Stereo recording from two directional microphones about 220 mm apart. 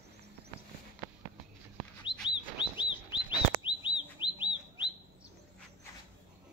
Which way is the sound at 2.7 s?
20° left (ahead or behind).